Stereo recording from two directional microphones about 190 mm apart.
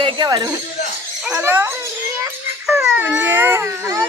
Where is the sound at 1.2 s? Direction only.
10° right (ahead or behind).